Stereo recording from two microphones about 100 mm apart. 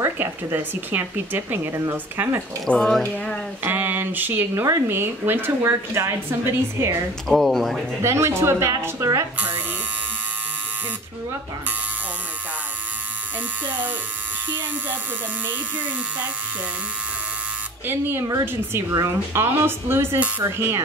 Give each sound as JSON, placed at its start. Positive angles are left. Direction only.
{"t": 0.0, "sound": "speech", "side_deg": -20}
{"t": 2.7, "sound": "speech", "side_deg": 5}
{"t": 3.6, "sound": "speech", "side_deg": -20}
{"t": 7.2, "sound": "speech", "side_deg": 0}
{"t": 8.0, "sound": "speech", "side_deg": -25}
{"t": 13.7, "sound": "speech", "side_deg": -20}
{"t": 17.8, "sound": "speech", "side_deg": -20}